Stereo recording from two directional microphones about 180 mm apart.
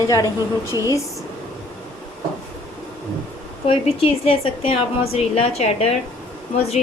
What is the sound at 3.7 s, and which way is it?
A woman's voice, 30° left (ahead or behind).